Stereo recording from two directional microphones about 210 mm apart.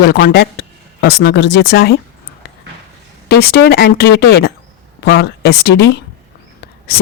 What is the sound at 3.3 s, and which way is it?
Speech, 50° left (ahead or behind).